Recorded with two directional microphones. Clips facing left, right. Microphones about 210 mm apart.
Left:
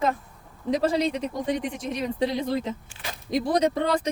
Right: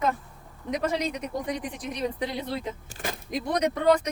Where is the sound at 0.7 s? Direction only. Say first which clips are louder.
Left 5 dB; 30° left (ahead or behind).